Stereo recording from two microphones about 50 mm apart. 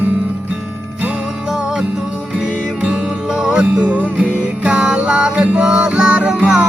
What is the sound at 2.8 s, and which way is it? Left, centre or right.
Music, centre.